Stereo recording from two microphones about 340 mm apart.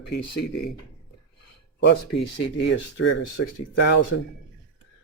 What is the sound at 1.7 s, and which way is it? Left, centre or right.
Speech, left.